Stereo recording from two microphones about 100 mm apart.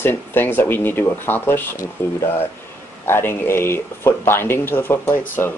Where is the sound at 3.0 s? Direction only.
25° left (ahead or behind).